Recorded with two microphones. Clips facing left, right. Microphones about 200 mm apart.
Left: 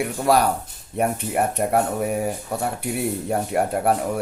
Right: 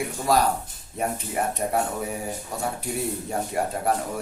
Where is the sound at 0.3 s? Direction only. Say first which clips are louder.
Left 3 dB; 65° left (ahead or behind).